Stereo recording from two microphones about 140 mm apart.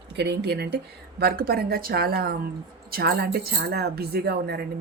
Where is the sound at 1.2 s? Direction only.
90° right.